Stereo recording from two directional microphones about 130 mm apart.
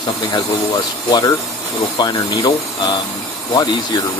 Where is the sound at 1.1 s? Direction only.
30° left (ahead or behind).